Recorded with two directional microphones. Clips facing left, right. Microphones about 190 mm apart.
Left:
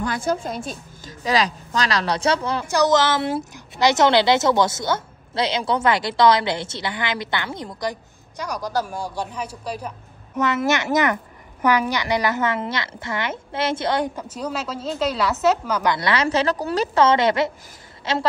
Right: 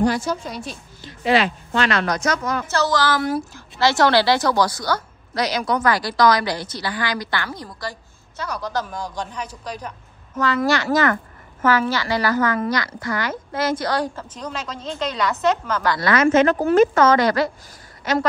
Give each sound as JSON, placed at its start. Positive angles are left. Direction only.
{"t": 0.1, "sound": "a woman's voice", "side_deg": 50}
{"t": 1.8, "sound": "a woman's voice", "side_deg": 35}
{"t": 2.7, "sound": "a woman's voice", "side_deg": 20}
{"t": 10.4, "sound": "a woman's voice", "side_deg": 20}
{"t": 14.3, "sound": "a woman's voice", "side_deg": 5}
{"t": 15.8, "sound": "a woman's voice", "side_deg": 20}